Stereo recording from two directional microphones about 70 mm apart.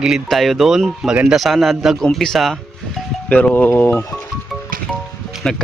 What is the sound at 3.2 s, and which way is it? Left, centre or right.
Speech, left.